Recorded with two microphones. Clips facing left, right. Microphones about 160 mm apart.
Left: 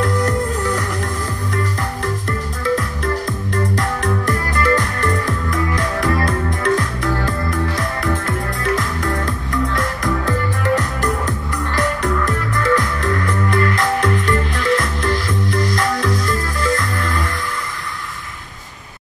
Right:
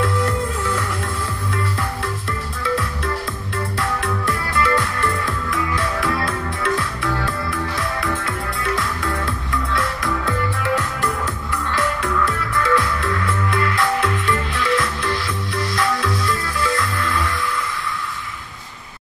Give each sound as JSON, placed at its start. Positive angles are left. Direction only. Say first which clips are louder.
{"t": 0.0, "sound": "music", "louder": "left 2 dB", "side_deg": 40}
{"t": 2.6, "sound": "music", "louder": "left 3 dB", "side_deg": 45}